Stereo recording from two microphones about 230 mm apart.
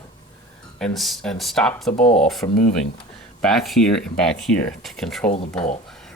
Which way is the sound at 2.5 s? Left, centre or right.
Left.